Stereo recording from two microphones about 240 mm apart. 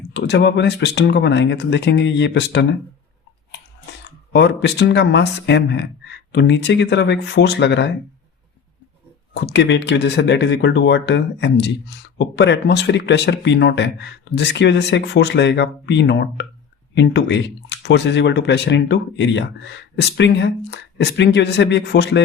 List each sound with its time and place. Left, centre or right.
0.1 s speech: left
4.3 s speech: left
9.3 s speech: left